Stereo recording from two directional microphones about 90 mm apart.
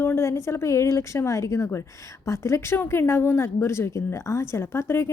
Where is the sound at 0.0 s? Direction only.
30° left (ahead or behind).